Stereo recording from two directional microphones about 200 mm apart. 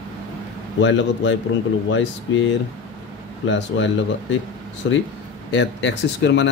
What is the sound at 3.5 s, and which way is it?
Speech, 65° left (ahead or behind).